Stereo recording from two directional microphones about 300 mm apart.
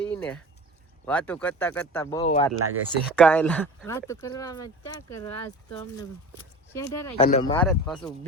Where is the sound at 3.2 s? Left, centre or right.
Centre.